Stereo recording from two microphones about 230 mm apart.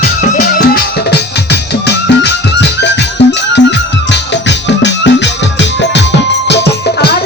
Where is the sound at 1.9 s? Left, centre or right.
Left.